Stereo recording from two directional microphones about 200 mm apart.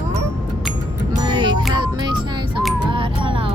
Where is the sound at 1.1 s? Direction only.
20° right (ahead or behind).